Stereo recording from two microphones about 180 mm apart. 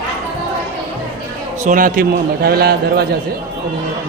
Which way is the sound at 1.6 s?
50° right (ahead or behind).